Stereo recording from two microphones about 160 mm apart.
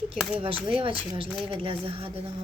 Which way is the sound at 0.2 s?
5° right (ahead or behind).